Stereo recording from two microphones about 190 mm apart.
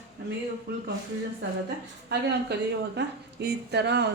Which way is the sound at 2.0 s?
60° right (ahead or behind).